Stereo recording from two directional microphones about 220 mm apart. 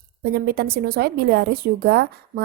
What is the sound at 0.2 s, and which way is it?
Speech, 45° right (ahead or behind).